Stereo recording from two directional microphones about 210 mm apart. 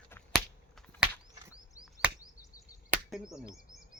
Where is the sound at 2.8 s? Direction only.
Centre (ahead or behind).